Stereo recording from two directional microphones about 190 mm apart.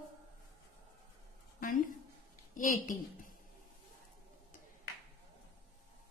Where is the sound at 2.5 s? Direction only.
45° left (ahead or behind).